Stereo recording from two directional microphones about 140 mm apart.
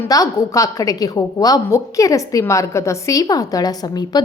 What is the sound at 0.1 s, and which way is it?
A woman's voice, 25° left (ahead or behind).